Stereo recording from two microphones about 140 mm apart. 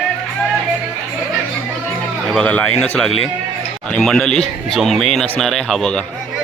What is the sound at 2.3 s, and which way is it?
Speech, 10° left (ahead or behind).